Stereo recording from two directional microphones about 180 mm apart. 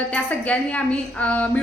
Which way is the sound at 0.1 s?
5° left (ahead or behind).